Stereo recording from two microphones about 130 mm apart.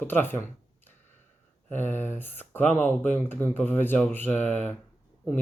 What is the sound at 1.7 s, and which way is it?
Speech, 15° left (ahead or behind).